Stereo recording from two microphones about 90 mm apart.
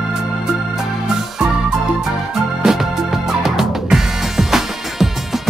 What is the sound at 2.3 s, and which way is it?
Music, 5° right (ahead or behind).